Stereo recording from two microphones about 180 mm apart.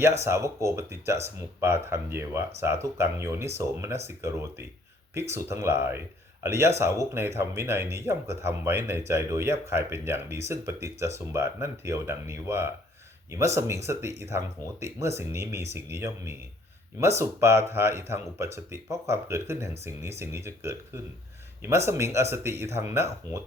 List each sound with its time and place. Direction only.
0.3 s speech: 15° right (ahead or behind)
13.8 s speech: 15° right (ahead or behind)